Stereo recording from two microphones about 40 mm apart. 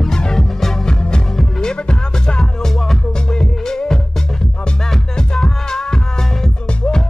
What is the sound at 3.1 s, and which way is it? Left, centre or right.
Music, centre.